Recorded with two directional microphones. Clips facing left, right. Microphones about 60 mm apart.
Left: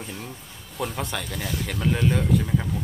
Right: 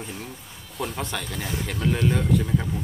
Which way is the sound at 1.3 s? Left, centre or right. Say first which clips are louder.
Even; right.